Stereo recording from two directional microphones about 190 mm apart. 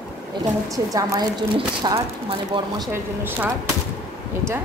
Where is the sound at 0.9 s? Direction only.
20° right (ahead or behind).